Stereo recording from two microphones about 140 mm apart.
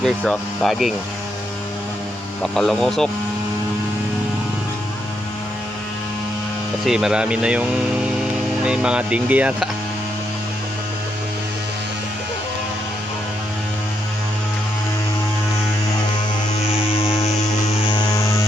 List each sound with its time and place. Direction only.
0.0 s speech: 5° left (ahead or behind)
2.4 s speech: 5° left (ahead or behind)
6.8 s speech: 5° right (ahead or behind)
16.9 s a sound: 45° left (ahead or behind)
17.8 s music: 30° left (ahead or behind)